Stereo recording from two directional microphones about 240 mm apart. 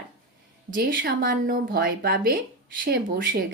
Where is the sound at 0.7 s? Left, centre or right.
Right.